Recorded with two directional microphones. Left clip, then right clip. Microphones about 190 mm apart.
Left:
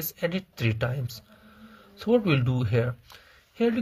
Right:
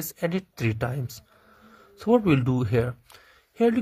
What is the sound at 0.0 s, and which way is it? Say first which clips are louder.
Speech: right 1 dB; 35° right (ahead or behind).